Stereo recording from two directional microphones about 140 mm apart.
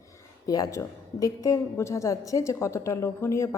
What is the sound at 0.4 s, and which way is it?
A woman's voice, 25° left (ahead or behind).